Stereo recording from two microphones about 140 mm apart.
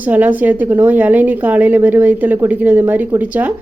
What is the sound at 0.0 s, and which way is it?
A woman's voice, 10° right (ahead or behind).